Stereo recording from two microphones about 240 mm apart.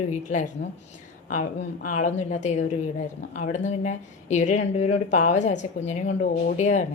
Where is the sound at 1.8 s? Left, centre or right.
Left.